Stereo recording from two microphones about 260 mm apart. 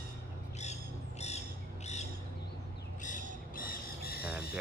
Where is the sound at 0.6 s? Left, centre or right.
Left.